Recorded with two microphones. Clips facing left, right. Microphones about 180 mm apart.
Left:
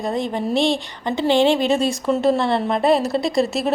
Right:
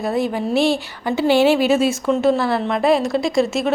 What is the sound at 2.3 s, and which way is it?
Speech, 25° left (ahead or behind).